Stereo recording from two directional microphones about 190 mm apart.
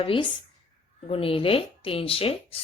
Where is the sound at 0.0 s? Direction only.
30° left (ahead or behind).